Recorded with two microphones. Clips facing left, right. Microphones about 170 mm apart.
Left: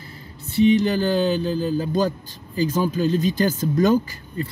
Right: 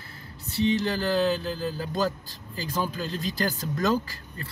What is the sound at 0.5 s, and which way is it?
Speech, 20° left (ahead or behind).